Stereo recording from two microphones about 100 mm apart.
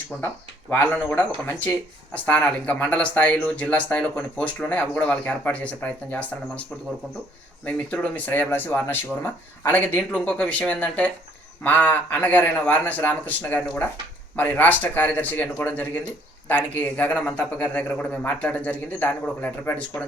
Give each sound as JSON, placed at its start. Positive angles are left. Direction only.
{"t": 0.1, "sound": "speech", "side_deg": 20}
{"t": 7.6, "sound": "speech", "side_deg": 15}